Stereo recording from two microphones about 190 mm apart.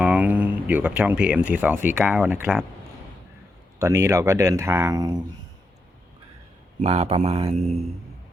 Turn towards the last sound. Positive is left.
turn(degrees=-35)  # may be behind; listen again after turning